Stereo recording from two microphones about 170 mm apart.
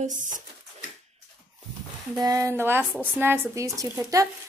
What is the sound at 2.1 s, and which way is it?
Speech, 20° right (ahead or behind).